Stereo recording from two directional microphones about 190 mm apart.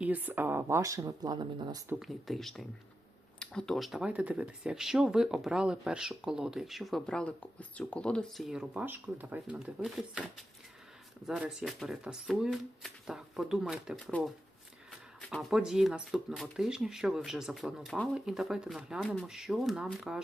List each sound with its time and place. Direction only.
0.0 s speech: 10° right (ahead or behind)
2.0 s speech: centre (ahead or behind)